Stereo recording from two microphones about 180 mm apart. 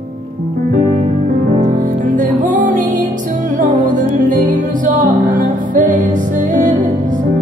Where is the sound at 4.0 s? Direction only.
45° right (ahead or behind).